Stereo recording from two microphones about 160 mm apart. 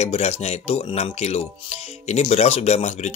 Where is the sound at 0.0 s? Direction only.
40° left (ahead or behind).